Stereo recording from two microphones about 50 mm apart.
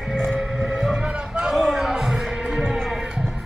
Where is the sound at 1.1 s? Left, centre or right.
Right.